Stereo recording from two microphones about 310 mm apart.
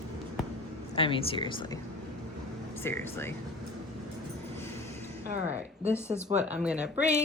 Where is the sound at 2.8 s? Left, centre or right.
Centre.